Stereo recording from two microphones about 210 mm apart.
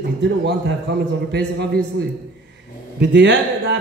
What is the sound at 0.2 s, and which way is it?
A man's voice, 55° right (ahead or behind).